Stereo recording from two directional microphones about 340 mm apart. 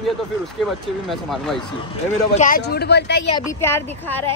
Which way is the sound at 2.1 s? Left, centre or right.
Left.